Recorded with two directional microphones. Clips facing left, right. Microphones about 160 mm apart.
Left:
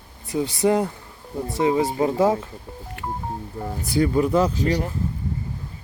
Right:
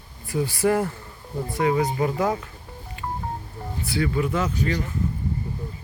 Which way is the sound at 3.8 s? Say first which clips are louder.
Left 4 dB; 40° left (ahead or behind).